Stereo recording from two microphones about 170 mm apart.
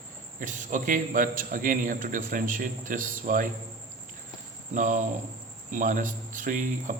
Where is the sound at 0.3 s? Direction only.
50° right (ahead or behind).